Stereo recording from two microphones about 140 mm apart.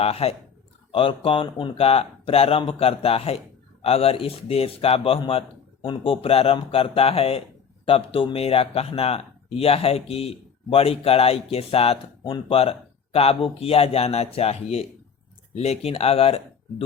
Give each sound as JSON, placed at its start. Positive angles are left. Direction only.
{"t": 0.0, "sound": "a man's voice", "side_deg": 45}